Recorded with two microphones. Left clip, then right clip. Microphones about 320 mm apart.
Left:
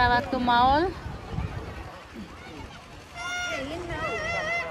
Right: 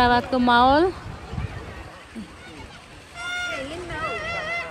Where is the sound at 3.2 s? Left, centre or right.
Left.